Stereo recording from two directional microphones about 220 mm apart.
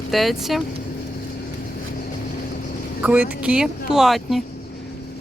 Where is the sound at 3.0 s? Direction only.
5° right (ahead or behind).